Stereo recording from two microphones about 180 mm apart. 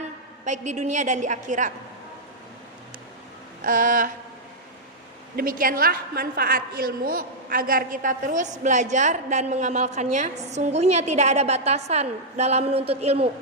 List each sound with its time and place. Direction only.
0.4 s a woman's voice: 40° right (ahead or behind)
3.6 s a woman's voice: 50° right (ahead or behind)
5.4 s a woman's voice: 50° right (ahead or behind); by 13.3 s 35° right (ahead or behind)